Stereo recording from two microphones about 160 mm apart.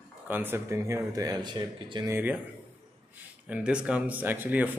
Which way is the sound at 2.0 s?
15° right (ahead or behind).